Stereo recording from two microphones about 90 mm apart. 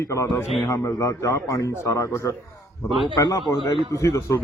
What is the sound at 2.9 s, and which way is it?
Speech, 65° right (ahead or behind).